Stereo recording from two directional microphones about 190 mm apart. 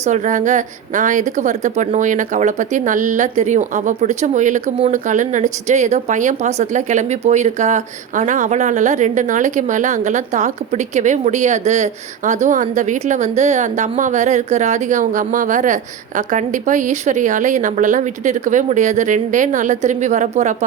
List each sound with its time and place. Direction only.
0.0 s a woman's voice: 40° right (ahead or behind)